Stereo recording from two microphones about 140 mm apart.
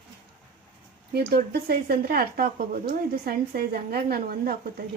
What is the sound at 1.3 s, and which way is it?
Speech, 90° right.